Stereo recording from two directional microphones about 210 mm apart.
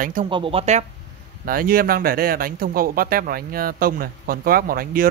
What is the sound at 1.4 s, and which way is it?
Speech, 45° right (ahead or behind).